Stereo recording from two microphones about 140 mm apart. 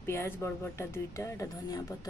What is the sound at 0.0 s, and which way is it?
Speech, 20° left (ahead or behind).